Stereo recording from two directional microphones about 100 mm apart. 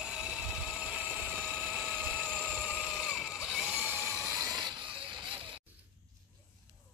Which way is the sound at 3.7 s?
20° right (ahead or behind).